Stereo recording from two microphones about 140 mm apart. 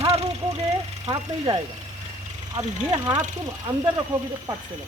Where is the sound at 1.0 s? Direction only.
30° right (ahead or behind).